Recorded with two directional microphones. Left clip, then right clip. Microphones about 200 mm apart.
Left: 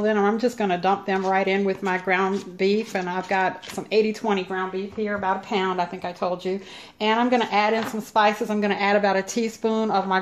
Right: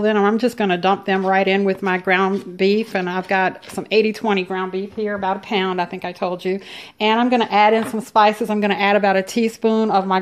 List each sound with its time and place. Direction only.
0.0 s speech: 40° right (ahead or behind)